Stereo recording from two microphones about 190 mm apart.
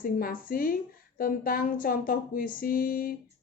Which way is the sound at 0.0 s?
50° left (ahead or behind).